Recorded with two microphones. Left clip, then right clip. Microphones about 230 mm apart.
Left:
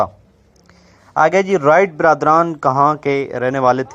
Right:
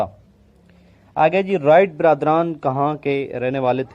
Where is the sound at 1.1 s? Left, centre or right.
Left.